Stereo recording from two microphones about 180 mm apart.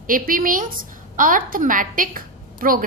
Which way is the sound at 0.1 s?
50° right (ahead or behind).